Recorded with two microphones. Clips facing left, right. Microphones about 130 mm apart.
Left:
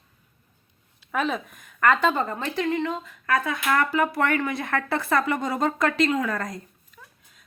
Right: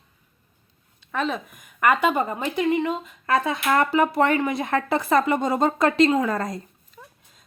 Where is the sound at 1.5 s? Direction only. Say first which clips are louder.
Right 2 dB; 10° right (ahead or behind); by 7.4 s 30° right (ahead or behind).